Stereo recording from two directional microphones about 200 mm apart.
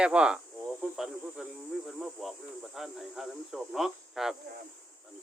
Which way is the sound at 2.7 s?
Centre (ahead or behind).